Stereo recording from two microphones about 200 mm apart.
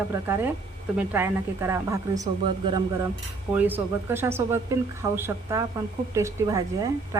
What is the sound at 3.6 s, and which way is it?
A woman's voice, 10° right (ahead or behind).